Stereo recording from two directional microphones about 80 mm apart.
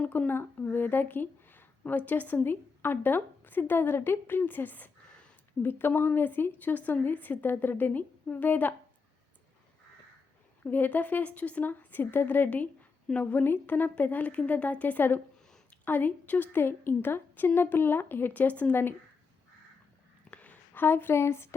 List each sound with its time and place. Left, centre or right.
0.0 s speech: left
10.6 s speech: left
20.3 s a sound: centre